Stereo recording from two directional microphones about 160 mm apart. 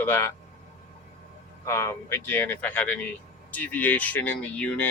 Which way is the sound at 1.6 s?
15° left (ahead or behind).